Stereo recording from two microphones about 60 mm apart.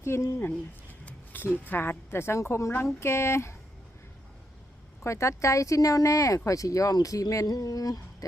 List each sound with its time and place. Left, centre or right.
0.0 s a woman's voice: left
1.0 s a sound: left
1.5 s a woman's voice: left
5.0 s speech: left